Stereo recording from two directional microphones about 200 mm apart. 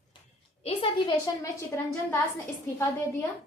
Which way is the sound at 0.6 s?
25° left (ahead or behind).